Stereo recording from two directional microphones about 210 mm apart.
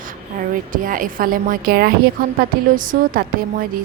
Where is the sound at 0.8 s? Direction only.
40° right (ahead or behind).